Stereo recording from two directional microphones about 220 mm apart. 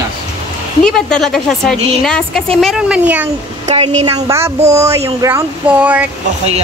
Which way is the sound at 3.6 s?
30° right (ahead or behind).